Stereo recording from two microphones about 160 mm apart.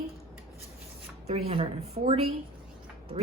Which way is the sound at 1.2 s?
40° right (ahead or behind).